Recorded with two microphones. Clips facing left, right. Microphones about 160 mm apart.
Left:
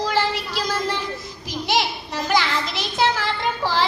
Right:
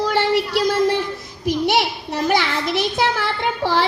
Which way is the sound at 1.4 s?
60° right (ahead or behind).